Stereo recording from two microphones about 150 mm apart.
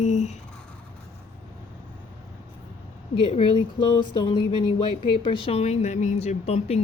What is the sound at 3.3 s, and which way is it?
Speech, 40° left (ahead or behind).